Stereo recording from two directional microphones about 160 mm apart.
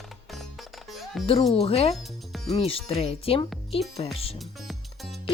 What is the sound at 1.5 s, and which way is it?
Speech, 40° left (ahead or behind).